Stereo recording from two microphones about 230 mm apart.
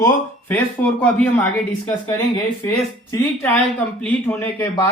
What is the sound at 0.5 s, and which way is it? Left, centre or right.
Speech, centre.